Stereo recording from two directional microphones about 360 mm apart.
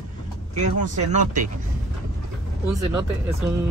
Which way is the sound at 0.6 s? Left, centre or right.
Centre.